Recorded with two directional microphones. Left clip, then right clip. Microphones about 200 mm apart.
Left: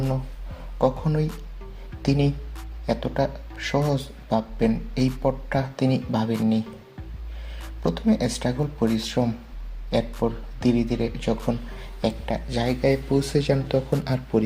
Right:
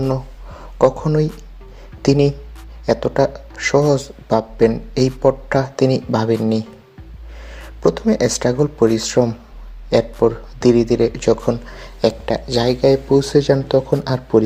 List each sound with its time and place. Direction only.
0.8 s speech: 35° right (ahead or behind)
7.8 s speech: 40° right (ahead or behind)